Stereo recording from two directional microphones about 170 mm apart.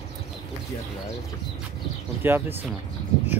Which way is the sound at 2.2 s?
10° right (ahead or behind).